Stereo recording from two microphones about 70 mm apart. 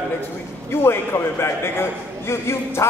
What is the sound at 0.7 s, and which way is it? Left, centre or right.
A man's voice, left.